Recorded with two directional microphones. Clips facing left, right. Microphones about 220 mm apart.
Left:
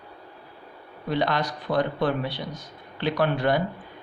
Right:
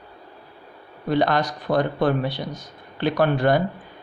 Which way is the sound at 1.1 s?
45° right (ahead or behind).